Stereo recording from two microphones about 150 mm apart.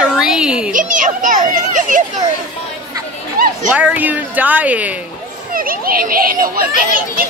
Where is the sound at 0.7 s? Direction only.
60° right (ahead or behind).